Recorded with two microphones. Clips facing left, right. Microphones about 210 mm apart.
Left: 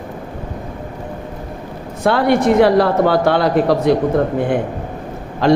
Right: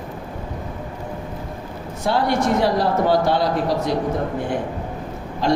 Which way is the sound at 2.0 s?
60° left (ahead or behind).